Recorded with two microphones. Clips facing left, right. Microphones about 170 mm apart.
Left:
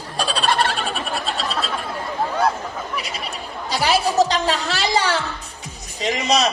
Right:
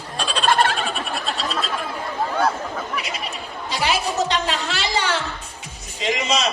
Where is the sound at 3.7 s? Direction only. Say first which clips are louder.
Left 5 dB; 35° left (ahead or behind).